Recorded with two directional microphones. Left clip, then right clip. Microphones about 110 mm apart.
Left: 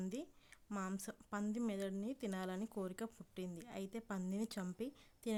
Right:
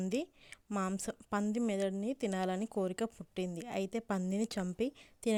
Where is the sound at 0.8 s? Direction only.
55° right (ahead or behind).